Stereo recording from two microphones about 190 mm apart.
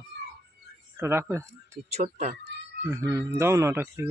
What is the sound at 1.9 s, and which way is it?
Speech, 35° right (ahead or behind).